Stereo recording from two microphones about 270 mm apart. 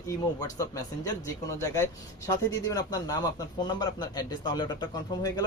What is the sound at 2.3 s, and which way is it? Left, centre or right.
Speech, centre.